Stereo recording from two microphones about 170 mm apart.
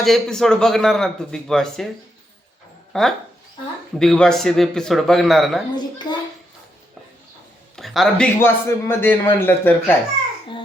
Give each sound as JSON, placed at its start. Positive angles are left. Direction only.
{"t": 0.0, "sound": "a man's voice", "side_deg": 0}
{"t": 2.9, "sound": "a man's voice", "side_deg": 0}
{"t": 6.0, "sound": "a sound", "side_deg": 25}
{"t": 7.8, "sound": "speech", "side_deg": 0}
{"t": 8.4, "sound": "a man's voice", "side_deg": 15}